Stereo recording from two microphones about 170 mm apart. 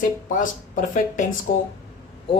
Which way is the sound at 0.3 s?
50° left (ahead or behind).